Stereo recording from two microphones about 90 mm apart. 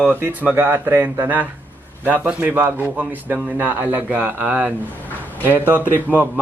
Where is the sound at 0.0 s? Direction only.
20° right (ahead or behind).